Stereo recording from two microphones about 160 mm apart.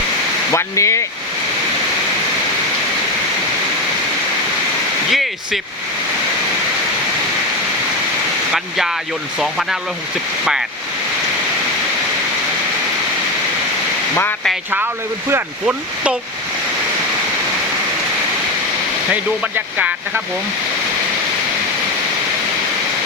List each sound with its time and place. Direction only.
0.5 s speech: 20° left (ahead or behind)
5.1 s a sound: centre (ahead or behind)
9.4 s speech: centre (ahead or behind)
15.3 s speech: 10° right (ahead or behind)
19.1 s speech: 10° right (ahead or behind)